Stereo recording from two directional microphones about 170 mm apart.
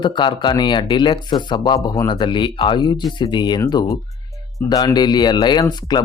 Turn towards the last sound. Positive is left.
turn(degrees=25)  # may be behind; listen again after turning